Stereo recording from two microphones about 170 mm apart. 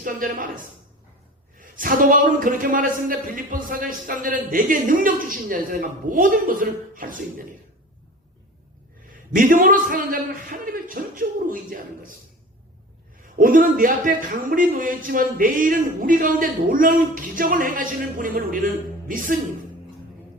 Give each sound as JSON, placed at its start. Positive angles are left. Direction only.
{"t": 0.0, "sound": "speech", "side_deg": -55}
{"t": 9.3, "sound": "speech", "side_deg": -55}
{"t": 13.4, "sound": "speech", "side_deg": -55}